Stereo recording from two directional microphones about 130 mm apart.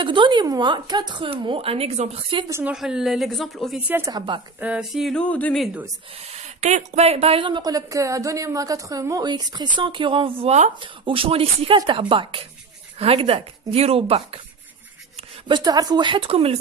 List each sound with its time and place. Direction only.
0.0 s speech: 40° right (ahead or behind)
2.7 s speech: 5° right (ahead or behind)
4.6 s speech: 10° right (ahead or behind)
5.2 s speech: 10° left (ahead or behind)
6.1 s a woman's voice: 50° right (ahead or behind)
15.4 s speech: 35° right (ahead or behind)